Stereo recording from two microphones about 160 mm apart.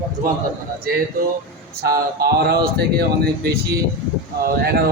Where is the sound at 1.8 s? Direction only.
75° right (ahead or behind).